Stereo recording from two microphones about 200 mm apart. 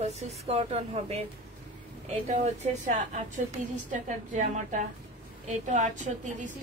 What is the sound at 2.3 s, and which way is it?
A woman's voice, 35° right (ahead or behind).